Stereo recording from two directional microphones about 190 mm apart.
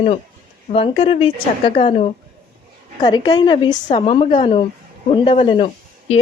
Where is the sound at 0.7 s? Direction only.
30° left (ahead or behind).